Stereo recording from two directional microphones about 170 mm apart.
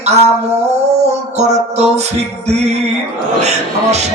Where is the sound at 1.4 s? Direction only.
40° right (ahead or behind).